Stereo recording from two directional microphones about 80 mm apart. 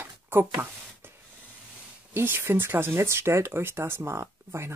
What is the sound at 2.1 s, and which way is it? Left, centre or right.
Speech, right.